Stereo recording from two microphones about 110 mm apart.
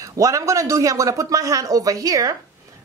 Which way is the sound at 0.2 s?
30° right (ahead or behind).